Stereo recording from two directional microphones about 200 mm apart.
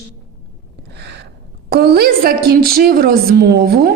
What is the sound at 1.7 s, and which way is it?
A woman's voice, 55° right (ahead or behind).